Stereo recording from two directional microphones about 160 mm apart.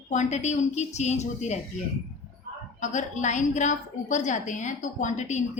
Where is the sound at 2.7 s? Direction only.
50° left (ahead or behind).